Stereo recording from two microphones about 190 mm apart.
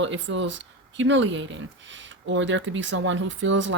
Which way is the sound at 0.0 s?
75° right (ahead or behind).